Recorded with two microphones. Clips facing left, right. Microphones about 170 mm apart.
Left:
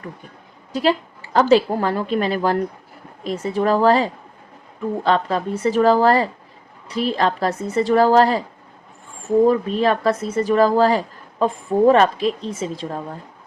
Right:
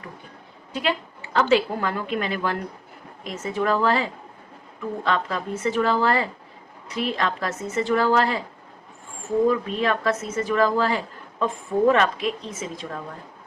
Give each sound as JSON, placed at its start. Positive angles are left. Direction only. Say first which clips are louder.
{"t": 0.7, "sound": "a woman's voice", "louder": "left 7 dB", "side_deg": 35}
{"t": 9.5, "sound": "a woman's voice", "louder": "left 5 dB", "side_deg": 35}